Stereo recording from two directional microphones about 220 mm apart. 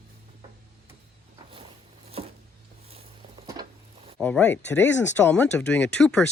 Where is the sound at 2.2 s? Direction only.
25° right (ahead or behind).